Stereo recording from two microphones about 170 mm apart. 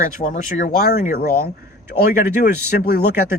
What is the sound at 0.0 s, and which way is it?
Speech, 50° left (ahead or behind).